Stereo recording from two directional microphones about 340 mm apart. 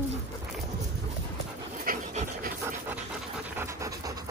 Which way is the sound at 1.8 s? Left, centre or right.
Right.